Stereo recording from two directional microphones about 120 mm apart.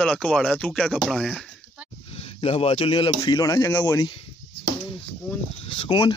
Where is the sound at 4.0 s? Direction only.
45° left (ahead or behind).